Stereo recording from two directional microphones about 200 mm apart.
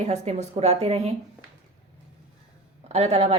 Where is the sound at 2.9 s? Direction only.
30° right (ahead or behind).